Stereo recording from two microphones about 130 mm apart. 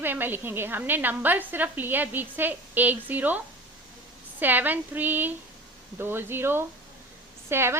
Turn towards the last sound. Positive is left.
turn(degrees=-20)  # may be behind; listen again after turning